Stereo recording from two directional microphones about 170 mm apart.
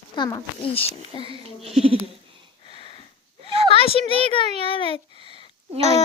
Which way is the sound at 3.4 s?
35° right (ahead or behind).